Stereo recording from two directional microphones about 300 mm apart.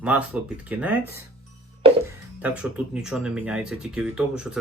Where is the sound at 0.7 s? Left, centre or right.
Centre.